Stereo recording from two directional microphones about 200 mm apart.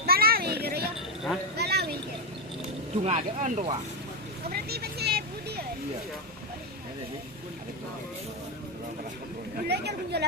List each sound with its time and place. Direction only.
0.0 s a sound: 50° right (ahead or behind)
3.0 s speech: 35° right (ahead or behind)
4.5 s vehicle: 50° right (ahead or behind)
9.6 s speech: 55° right (ahead or behind)